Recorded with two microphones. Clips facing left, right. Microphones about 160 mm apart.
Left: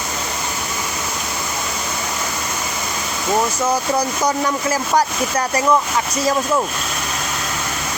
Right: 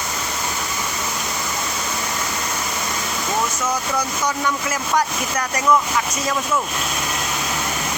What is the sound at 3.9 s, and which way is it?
Speech, 35° left (ahead or behind).